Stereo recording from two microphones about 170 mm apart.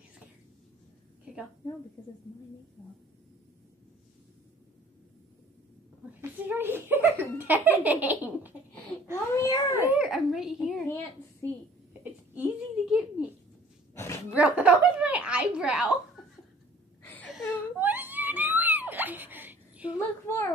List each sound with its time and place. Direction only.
6.4 s speech: 10° right (ahead or behind)
9.1 s a child's voice: 15° left (ahead or behind)
9.8 s a child's voice: 5° right (ahead or behind)
11.4 s a child's voice: 10° left (ahead or behind)
12.0 s a sound: 5° right (ahead or behind)
13.9 s a sound: 15° left (ahead or behind)
14.3 s a child's voice: 10° right (ahead or behind)
17.0 s a sound: 10° left (ahead or behind)
17.5 s whimper: 10° right (ahead or behind)
20.0 s a child's voice: 15° left (ahead or behind)